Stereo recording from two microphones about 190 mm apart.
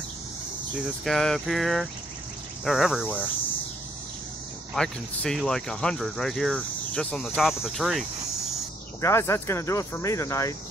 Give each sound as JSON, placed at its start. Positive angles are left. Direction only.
{"t": 0.7, "sound": "speech", "side_deg": 0}
{"t": 4.7, "sound": "speech", "side_deg": 5}
{"t": 9.0, "sound": "speech", "side_deg": 15}